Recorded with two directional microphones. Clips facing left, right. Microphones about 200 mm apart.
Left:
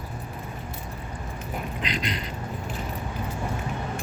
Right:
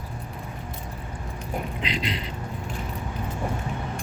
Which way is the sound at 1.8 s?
25° right (ahead or behind).